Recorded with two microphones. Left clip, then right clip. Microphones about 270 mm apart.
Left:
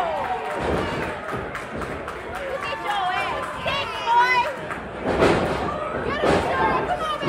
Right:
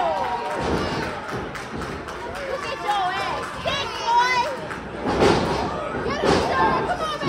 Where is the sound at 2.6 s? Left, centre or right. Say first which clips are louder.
Right 1 dB; right.